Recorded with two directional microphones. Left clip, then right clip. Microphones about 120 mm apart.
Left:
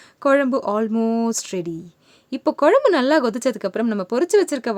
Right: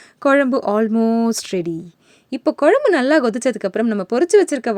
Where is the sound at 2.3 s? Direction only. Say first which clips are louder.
Right 1 dB; 20° right (ahead or behind).